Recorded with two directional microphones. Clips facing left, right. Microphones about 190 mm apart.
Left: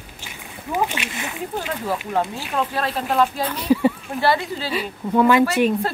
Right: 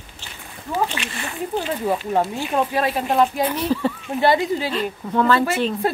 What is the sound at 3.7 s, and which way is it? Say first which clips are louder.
Speech: left 4 dB; 10° left (ahead or behind).